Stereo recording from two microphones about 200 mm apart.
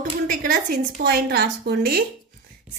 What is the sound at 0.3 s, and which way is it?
Speech, 40° right (ahead or behind).